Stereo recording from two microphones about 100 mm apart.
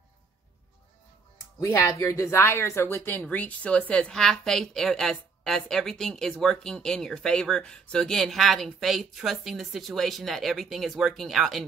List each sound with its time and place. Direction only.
1.6 s speech: 30° left (ahead or behind)
3.2 s a woman's voice: 15° left (ahead or behind); by 11.6 s centre (ahead or behind)